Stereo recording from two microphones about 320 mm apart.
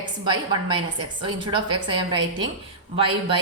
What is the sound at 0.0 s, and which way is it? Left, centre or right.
A woman's voice, centre.